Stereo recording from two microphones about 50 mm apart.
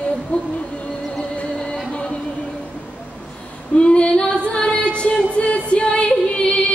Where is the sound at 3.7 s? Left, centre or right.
Left.